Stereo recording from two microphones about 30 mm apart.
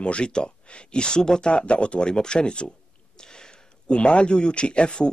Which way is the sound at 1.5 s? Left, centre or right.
Left.